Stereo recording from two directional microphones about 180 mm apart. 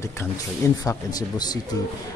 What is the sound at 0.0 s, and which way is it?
Speech, 15° left (ahead or behind).